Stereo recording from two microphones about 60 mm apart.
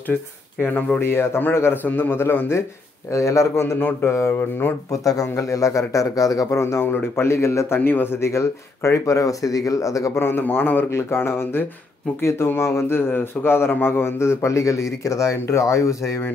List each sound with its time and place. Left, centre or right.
0.7 s speech: left
1.0 s a man's voice: left
3.1 s speech: left
3.7 s a man's voice: left
4.9 s speech: left
6.8 s speech: left
7.8 s speech: left
10.1 s a man's voice: left
10.9 s speech: left